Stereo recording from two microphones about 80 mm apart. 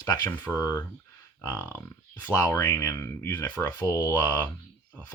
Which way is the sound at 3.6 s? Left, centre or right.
Centre.